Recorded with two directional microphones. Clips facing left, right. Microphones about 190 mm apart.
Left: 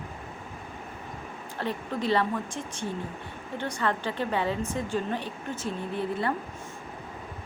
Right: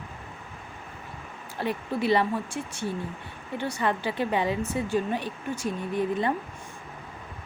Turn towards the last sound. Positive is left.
turn(degrees=-15)  # may be behind; listen again after turning